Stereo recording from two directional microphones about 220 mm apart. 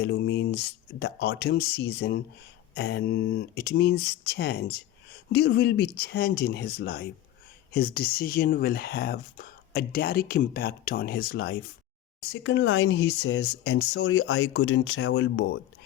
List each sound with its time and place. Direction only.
0.0 s speech: 50° left (ahead or behind)
12.3 s speech: 60° left (ahead or behind)